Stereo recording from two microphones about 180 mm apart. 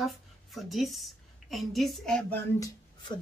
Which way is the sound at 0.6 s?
Centre (ahead or behind).